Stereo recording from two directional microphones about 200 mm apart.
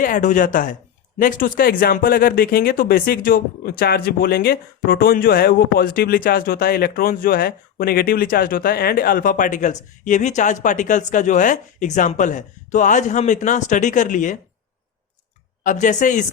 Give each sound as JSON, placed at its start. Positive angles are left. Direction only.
{"t": 0.0, "sound": "speech", "side_deg": 40}
{"t": 15.6, "sound": "speech", "side_deg": 40}